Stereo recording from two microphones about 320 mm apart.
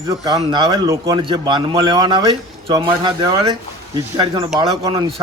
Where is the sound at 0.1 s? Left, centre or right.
Centre.